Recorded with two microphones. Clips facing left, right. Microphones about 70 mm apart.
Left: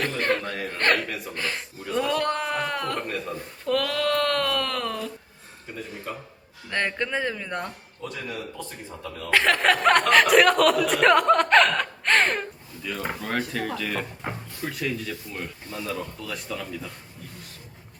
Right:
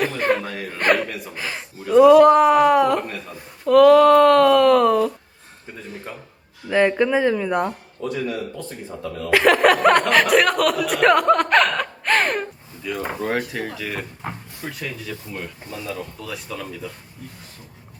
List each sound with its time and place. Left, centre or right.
0.0 s speech: centre
6.7 s speech: centre
8.0 s speech: right
9.3 s speech: centre
15.3 s speech: centre
16.0 s speech: centre